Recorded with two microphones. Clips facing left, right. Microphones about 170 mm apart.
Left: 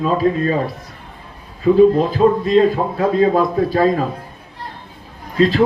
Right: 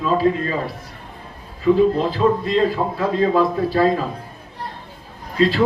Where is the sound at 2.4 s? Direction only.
45° left (ahead or behind).